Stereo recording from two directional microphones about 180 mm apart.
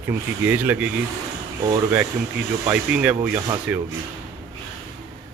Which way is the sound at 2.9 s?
5° right (ahead or behind).